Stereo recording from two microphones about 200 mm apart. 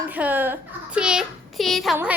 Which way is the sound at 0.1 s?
10° right (ahead or behind).